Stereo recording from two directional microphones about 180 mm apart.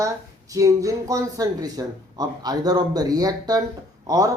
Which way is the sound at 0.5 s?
20° right (ahead or behind).